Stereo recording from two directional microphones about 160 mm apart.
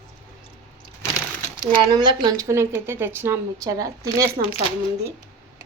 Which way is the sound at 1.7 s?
30° right (ahead or behind).